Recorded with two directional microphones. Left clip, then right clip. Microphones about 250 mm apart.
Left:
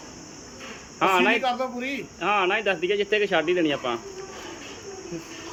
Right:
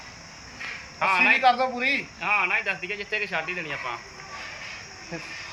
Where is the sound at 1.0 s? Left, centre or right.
Left.